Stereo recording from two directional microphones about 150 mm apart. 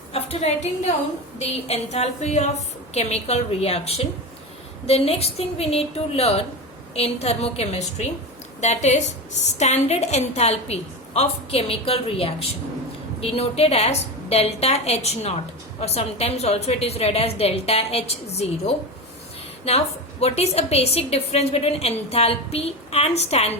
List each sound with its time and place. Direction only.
0.1 s a woman's voice: 45° left (ahead or behind)